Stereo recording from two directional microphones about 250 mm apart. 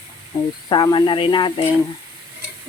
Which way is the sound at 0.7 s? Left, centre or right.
Centre.